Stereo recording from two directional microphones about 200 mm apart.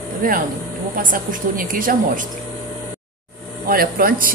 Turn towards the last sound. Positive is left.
turn(degrees=-45)  # may be behind; listen again after turning